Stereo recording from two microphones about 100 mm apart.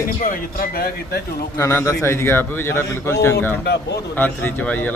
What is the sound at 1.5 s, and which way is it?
A man's voice, 25° left (ahead or behind).